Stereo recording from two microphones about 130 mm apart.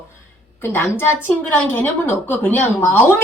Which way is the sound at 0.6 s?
15° left (ahead or behind).